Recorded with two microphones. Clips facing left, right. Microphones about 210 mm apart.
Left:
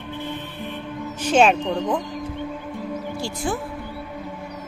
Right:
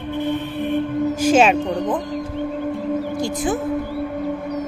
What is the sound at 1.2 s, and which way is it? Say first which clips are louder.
Speech: right 1 dB; 5° right (ahead or behind).